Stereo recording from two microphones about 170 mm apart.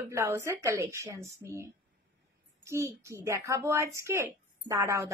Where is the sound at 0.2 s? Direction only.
15° right (ahead or behind).